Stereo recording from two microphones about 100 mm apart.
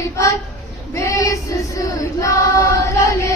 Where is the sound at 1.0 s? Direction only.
30° left (ahead or behind).